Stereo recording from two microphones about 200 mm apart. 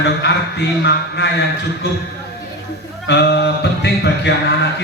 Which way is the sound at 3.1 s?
60° left (ahead or behind).